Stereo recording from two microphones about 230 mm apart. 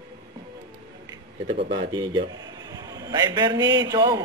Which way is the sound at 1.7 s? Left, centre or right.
Centre.